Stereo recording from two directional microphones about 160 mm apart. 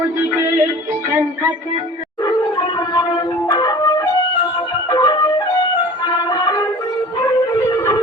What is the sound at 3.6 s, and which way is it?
Music, 25° left (ahead or behind).